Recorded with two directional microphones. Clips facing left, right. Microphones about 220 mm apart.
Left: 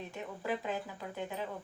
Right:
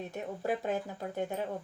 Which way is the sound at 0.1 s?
45° right (ahead or behind).